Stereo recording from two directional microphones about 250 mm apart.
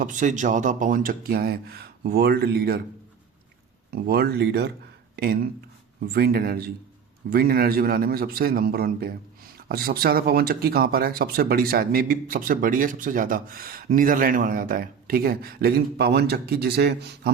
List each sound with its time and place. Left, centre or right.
0.0 s speech: right
3.9 s speech: right